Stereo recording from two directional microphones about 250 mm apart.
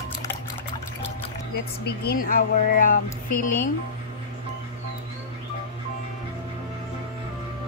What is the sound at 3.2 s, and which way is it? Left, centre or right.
Speech, left.